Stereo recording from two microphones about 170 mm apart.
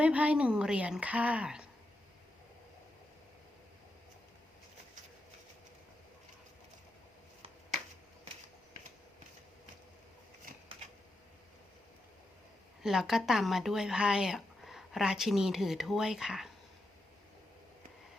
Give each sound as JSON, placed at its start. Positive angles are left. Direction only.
{"t": 0.0, "sound": "a woman's voice", "side_deg": -10}
{"t": 12.8, "sound": "speech", "side_deg": 0}